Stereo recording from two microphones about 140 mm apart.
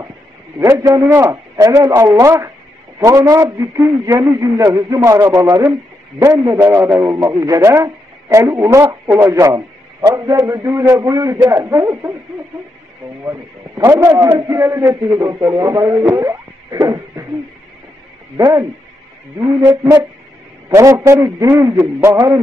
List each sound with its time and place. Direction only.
0.6 s a man's voice: 25° right (ahead or behind)
13.8 s a man's voice: 20° right (ahead or behind)
18.4 s a man's voice: 25° right (ahead or behind)
19.3 s a sound: 15° right (ahead or behind)
20.7 s a man's voice: 20° right (ahead or behind)